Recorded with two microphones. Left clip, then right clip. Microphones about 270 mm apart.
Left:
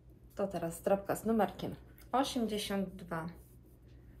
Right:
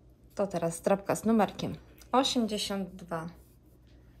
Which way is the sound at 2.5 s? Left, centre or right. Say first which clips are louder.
Right 3 dB; centre.